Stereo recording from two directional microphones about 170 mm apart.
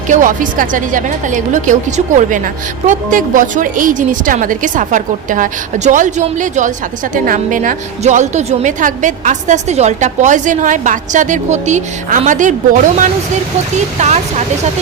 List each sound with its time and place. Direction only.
0.1 s a woman's voice: 50° right (ahead or behind)